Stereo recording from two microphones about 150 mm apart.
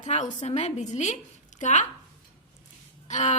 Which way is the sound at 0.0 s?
50° left (ahead or behind).